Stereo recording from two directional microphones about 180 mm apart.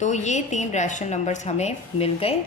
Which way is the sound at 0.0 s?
40° left (ahead or behind).